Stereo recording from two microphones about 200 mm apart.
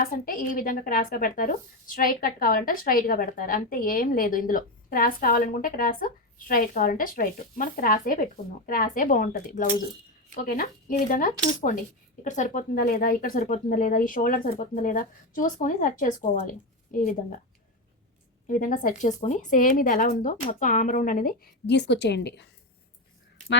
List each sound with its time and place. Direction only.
0.0 s a woman's voice: 45° left (ahead or behind)
18.4 s speech: 40° left (ahead or behind); by 22.4 s 60° left (ahead or behind)